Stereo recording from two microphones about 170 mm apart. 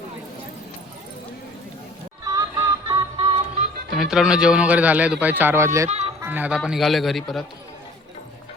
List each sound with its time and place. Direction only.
2.2 s music: 20° right (ahead or behind)
3.9 s speech: 5° right (ahead or behind)